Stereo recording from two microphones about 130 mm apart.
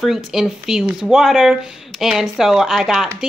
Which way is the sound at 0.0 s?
5° right (ahead or behind).